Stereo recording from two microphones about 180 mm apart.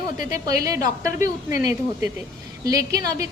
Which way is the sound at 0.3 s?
20° right (ahead or behind).